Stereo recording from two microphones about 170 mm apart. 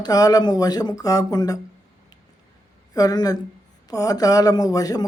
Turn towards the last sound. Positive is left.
turn(degrees=20)  # may be behind; listen again after turning